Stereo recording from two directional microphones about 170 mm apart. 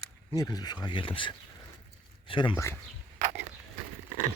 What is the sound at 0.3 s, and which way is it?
Speech, 20° left (ahead or behind).